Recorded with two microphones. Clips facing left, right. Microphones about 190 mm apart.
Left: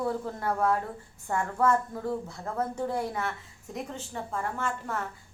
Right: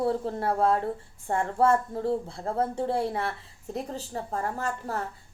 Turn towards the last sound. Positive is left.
turn(degrees=-35)  # may be behind; listen again after turning